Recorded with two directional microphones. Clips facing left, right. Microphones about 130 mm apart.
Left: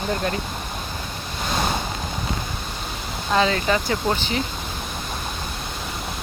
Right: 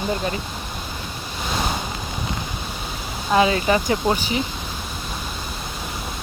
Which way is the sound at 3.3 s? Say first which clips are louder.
Right 3 dB; 15° right (ahead or behind).